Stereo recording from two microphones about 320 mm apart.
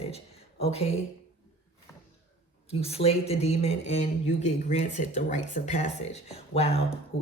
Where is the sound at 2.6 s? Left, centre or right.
Centre.